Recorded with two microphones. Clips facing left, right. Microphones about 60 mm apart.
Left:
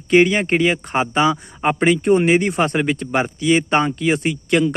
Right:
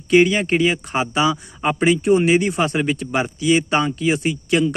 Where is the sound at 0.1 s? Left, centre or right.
Left.